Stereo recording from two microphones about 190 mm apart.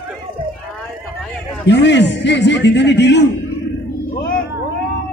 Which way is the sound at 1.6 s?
65° left (ahead or behind).